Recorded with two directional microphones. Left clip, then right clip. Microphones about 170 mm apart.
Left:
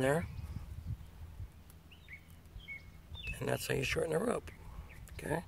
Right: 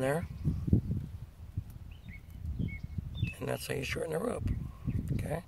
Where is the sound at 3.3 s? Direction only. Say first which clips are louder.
Left 1 dB; 40° left (ahead or behind).